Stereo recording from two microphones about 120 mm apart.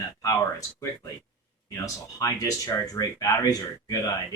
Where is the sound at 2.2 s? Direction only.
30° left (ahead or behind).